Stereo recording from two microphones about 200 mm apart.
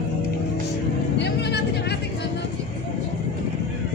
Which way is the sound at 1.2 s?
55° left (ahead or behind).